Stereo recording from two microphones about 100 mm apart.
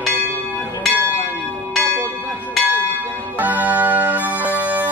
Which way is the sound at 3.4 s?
15° right (ahead or behind).